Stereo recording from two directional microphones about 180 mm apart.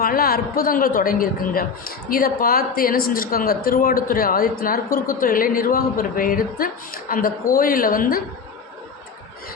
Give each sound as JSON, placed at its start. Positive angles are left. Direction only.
{"t": 0.0, "sound": "a woman's voice", "side_deg": 55}